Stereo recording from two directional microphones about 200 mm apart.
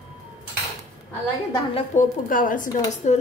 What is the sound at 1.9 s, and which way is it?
A woman's voice, 45° left (ahead or behind).